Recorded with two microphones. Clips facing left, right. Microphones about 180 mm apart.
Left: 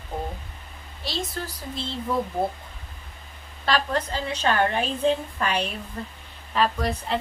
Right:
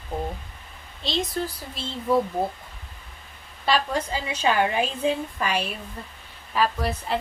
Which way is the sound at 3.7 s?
10° right (ahead or behind).